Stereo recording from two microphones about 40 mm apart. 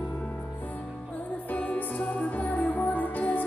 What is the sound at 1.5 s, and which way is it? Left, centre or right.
Music, left.